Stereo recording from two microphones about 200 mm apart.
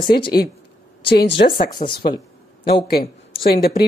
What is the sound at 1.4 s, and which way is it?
Speech, 45° left (ahead or behind).